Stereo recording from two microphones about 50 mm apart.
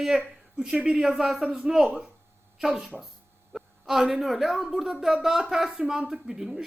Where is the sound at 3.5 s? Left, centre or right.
Centre.